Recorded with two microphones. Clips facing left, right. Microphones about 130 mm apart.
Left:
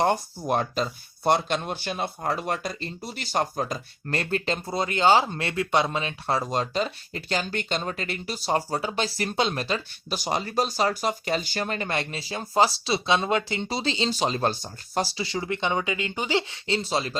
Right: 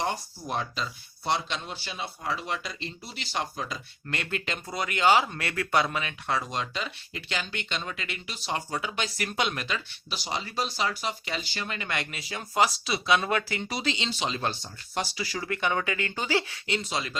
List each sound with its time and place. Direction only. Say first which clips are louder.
0.0 s speech: left 7 dB; 50° left (ahead or behind); by 17.2 s 35° left (ahead or behind)